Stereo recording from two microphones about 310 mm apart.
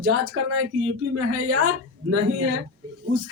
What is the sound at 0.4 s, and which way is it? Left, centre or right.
A woman's voice, right.